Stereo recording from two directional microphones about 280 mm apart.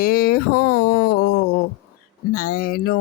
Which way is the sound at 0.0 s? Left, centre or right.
Left.